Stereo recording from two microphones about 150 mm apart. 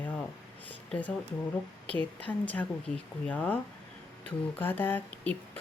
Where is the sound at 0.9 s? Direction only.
10° left (ahead or behind).